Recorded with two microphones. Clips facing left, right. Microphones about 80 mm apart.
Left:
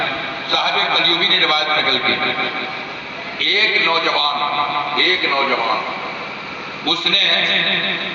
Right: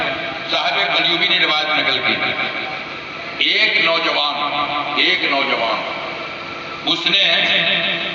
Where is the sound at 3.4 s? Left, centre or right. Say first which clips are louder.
Even; left.